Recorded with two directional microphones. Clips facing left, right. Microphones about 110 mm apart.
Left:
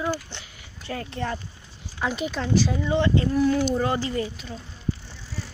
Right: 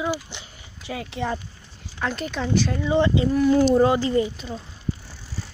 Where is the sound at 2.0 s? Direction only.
5° left (ahead or behind).